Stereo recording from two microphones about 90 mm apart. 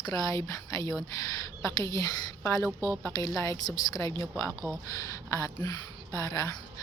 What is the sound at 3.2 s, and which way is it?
Speech, 40° left (ahead or behind).